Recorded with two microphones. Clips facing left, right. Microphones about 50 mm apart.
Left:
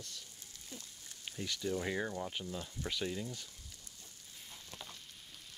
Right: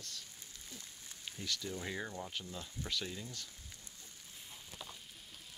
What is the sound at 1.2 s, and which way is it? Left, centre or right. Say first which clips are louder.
Speech: left 3 dB; left.